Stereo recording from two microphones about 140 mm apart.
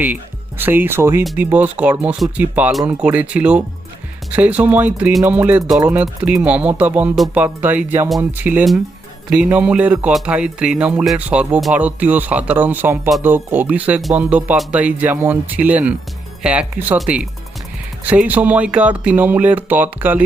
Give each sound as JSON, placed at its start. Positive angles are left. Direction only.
{"t": 0.6, "sound": "speech", "side_deg": -15}